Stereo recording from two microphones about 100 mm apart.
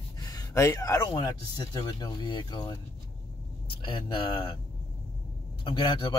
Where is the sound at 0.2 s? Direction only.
40° left (ahead or behind).